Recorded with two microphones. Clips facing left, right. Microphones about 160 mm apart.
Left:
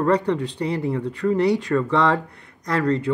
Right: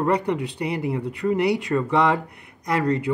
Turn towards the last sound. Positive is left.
turn(degrees=-15)  # may be behind; listen again after turning